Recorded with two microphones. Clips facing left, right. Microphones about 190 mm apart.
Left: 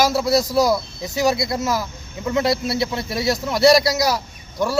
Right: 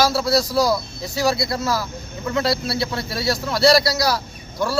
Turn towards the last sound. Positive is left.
turn(degrees=20)  # may be behind; listen again after turning